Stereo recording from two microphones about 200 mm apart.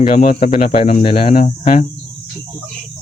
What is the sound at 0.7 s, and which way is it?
Speech, 35° left (ahead or behind).